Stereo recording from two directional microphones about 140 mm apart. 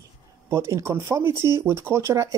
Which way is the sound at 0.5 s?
20° right (ahead or behind).